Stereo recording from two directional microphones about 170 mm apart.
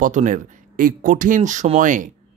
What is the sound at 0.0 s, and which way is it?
Speech, 50° right (ahead or behind).